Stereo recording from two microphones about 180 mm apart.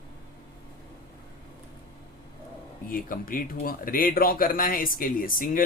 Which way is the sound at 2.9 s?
50° left (ahead or behind).